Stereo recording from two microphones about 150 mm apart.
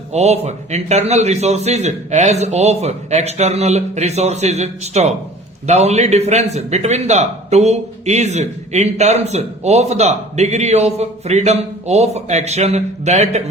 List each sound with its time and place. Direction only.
0.1 s a man's voice: 45° right (ahead or behind)